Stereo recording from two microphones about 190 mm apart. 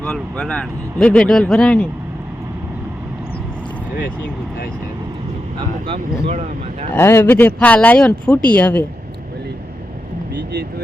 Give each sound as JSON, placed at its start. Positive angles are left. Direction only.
{"t": 0.0, "sound": "speech", "side_deg": 5}
{"t": 5.9, "sound": "speech", "side_deg": -35}
{"t": 6.9, "sound": "speech", "side_deg": 10}
{"t": 10.3, "sound": "speech", "side_deg": -60}